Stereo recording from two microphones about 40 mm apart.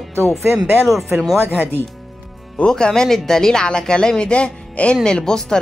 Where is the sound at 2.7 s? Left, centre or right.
Centre.